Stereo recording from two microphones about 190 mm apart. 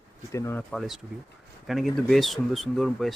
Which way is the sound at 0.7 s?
Centre (ahead or behind).